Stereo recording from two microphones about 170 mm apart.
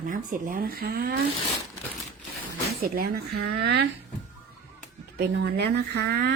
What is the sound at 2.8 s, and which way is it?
Speech, 60° right (ahead or behind).